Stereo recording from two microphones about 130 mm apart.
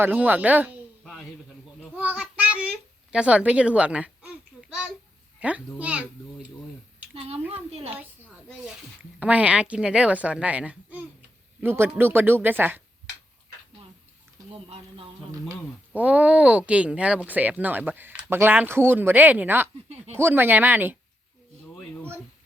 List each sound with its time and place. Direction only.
0.0 s speech: 15° right (ahead or behind)
1.0 s a sound: centre (ahead or behind)
2.0 s child singing: 15° right (ahead or behind)
3.1 s a sound: 10° right (ahead or behind)
5.4 s speech: 10° right (ahead or behind)
7.1 s speech: 50° right (ahead or behind)
9.1 s speech: 10° right (ahead or behind)
14.5 s a sound: 45° right (ahead or behind)
15.9 s speech: 10° right (ahead or behind)